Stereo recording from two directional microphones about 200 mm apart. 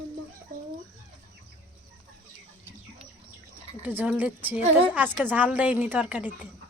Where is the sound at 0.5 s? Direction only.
45° right (ahead or behind).